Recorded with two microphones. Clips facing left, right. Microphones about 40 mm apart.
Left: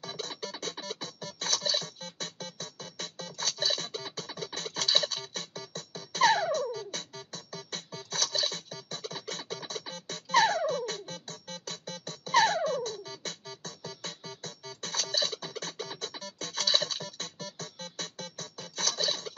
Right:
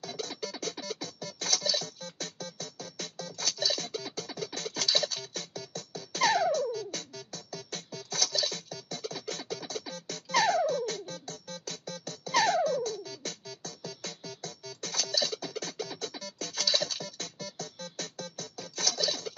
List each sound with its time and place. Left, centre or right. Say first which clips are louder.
0.0 s music: right 1 dB; left